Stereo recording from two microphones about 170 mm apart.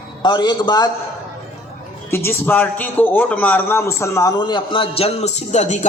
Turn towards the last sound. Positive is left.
turn(degrees=40)  # may be behind; listen again after turning